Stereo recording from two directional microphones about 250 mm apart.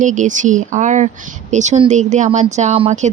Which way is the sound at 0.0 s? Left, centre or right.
Right.